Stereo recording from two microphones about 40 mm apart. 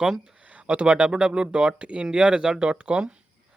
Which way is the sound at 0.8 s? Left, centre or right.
Right.